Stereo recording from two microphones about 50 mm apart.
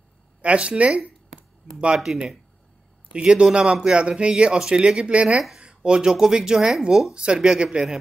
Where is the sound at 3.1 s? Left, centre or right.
Right.